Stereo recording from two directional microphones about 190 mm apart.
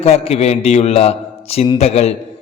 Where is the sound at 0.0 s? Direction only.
30° left (ahead or behind).